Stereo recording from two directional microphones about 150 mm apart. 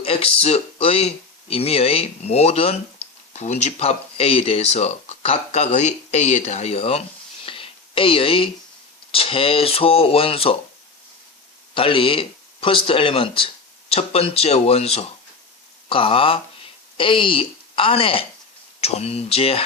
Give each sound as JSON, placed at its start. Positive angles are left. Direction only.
{"t": 0.0, "sound": "speech", "side_deg": 40}
{"t": 7.4, "sound": "a sound", "side_deg": 35}
{"t": 9.1, "sound": "speech", "side_deg": 40}
{"t": 11.7, "sound": "speech", "side_deg": 35}